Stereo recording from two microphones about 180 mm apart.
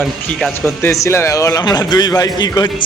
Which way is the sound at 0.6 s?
15° left (ahead or behind).